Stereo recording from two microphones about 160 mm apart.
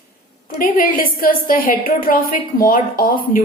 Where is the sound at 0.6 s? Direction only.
60° left (ahead or behind).